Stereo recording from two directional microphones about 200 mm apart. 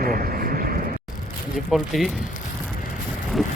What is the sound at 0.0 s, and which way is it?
Vehicle, 45° right (ahead or behind).